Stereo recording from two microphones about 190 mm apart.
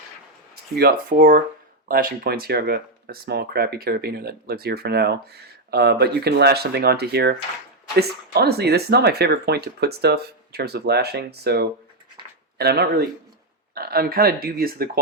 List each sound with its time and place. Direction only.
0.8 s speech: 50° right (ahead or behind)